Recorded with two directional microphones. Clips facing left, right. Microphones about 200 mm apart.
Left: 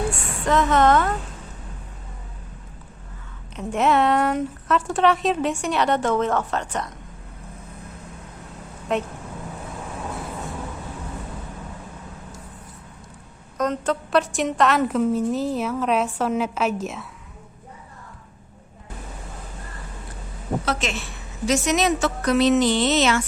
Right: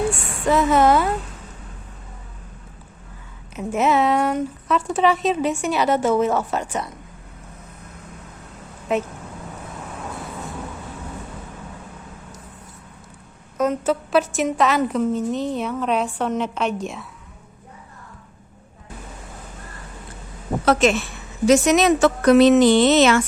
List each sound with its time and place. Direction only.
0.4 s a woman's voice: 10° right (ahead or behind)
3.5 s a woman's voice: 5° right (ahead or behind)
8.9 s a woman's voice: 5° right (ahead or behind)
13.6 s a woman's voice: 5° right (ahead or behind)
20.7 s a woman's voice: 50° right (ahead or behind)